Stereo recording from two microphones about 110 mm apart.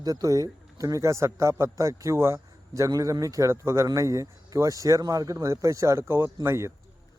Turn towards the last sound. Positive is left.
turn(degrees=-25)  # may be behind; listen again after turning